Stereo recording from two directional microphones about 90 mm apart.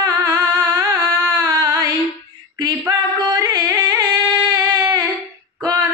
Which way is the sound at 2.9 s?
45° right (ahead or behind).